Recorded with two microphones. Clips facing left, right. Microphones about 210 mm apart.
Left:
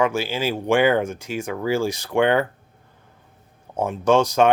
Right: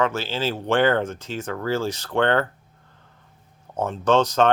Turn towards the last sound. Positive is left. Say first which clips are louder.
# left 2 dB
turn(degrees=10)  # may be behind; listen again after turning